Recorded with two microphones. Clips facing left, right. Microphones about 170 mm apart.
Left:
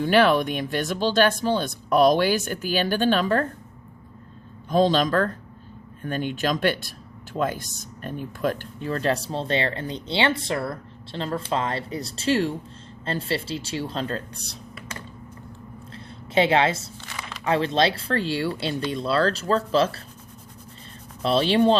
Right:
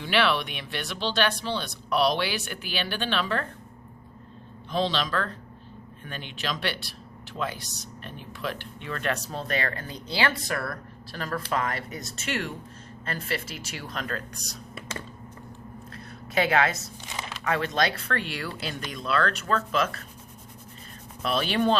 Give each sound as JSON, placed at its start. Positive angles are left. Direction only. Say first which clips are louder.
{"t": 0.0, "sound": "speech", "louder": "left 7 dB", "side_deg": 45}
{"t": 4.7, "sound": "speech", "louder": "left 7 dB", "side_deg": 45}
{"t": 15.9, "sound": "a sound", "louder": "left 2 dB", "side_deg": 25}
{"t": 17.4, "sound": "speech", "louder": "left 5 dB", "side_deg": 30}
{"t": 21.2, "sound": "speech", "louder": "left 6 dB", "side_deg": 30}